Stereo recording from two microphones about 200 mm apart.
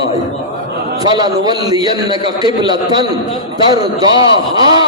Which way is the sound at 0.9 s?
20° right (ahead or behind).